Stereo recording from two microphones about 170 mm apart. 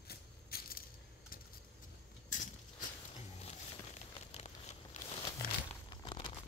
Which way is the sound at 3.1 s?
40° left (ahead or behind).